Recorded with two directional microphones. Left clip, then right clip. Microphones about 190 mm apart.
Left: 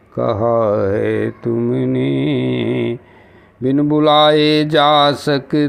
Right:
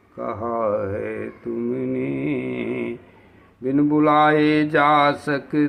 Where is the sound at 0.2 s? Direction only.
30° left (ahead or behind).